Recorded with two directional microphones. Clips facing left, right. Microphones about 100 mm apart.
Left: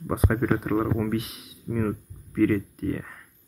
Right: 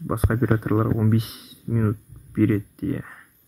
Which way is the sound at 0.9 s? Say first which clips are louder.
Right 4 dB; 25° right (ahead or behind).